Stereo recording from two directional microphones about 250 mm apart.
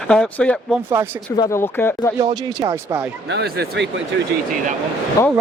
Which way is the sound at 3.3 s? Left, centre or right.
Right.